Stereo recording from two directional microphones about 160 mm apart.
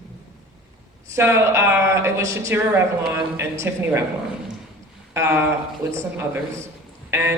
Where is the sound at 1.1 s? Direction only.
15° right (ahead or behind).